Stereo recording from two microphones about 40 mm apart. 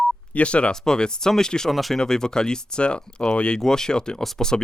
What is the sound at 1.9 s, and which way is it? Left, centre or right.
Speech, centre.